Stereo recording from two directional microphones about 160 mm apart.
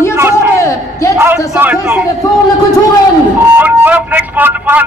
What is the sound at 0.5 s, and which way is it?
Speech, 20° left (ahead or behind).